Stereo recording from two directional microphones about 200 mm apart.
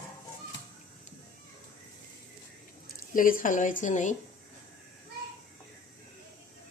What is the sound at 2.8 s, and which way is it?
Speech, 45° left (ahead or behind).